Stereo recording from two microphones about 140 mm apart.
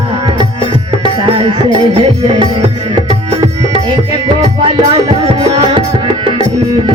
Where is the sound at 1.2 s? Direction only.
40° right (ahead or behind).